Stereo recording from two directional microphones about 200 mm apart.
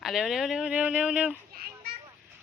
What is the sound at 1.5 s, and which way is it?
Children playing, 50° right (ahead or behind).